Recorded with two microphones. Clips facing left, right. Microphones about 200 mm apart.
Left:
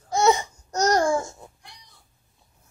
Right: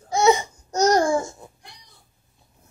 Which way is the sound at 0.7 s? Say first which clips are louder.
Right 3 dB; 15° right (ahead or behind).